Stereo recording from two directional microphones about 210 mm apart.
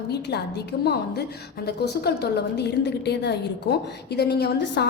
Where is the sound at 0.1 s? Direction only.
50° left (ahead or behind).